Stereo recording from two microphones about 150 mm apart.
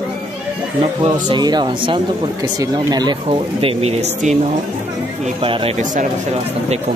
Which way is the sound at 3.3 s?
40° right (ahead or behind).